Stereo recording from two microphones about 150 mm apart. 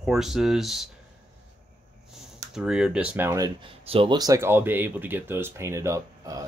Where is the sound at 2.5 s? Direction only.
5° right (ahead or behind); by 3.5 s 20° right (ahead or behind).